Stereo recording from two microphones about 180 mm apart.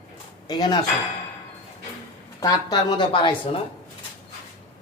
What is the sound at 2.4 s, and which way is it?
Speech, 20° left (ahead or behind).